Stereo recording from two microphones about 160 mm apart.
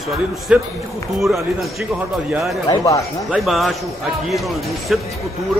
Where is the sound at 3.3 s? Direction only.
Centre (ahead or behind).